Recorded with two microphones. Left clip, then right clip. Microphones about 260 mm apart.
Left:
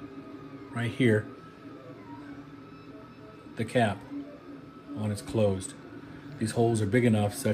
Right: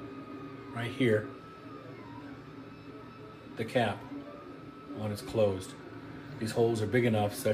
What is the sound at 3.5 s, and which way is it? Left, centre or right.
Speech, left.